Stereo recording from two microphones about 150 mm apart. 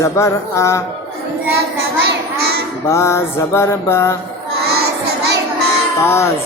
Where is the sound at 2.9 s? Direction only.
20° left (ahead or behind).